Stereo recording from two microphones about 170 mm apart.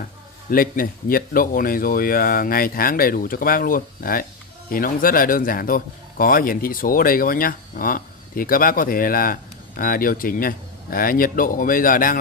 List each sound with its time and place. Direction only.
0.5 s speech: 55° left (ahead or behind)